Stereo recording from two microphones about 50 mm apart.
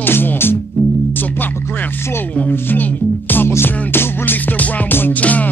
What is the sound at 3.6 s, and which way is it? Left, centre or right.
Music, left.